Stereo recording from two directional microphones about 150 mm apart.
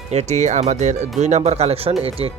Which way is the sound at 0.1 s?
45° right (ahead or behind).